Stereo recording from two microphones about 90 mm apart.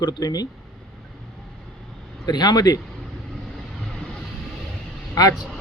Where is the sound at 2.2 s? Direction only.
50° left (ahead or behind).